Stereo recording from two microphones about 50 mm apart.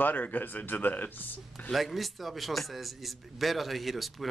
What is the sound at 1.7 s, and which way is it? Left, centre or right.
A man's voice, centre.